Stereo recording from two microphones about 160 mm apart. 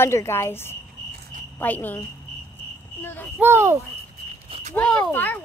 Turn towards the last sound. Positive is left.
turn(degrees=10)  # may be behind; listen again after turning